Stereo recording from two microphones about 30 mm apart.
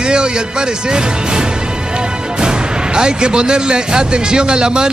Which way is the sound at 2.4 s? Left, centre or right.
Right.